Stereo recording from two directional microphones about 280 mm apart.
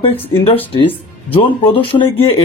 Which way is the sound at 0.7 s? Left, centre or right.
Centre.